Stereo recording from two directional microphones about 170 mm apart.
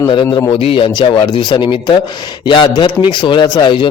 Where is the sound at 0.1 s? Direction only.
30° left (ahead or behind).